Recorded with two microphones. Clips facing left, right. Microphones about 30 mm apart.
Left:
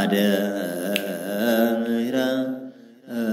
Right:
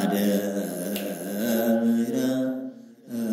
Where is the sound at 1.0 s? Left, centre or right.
Left.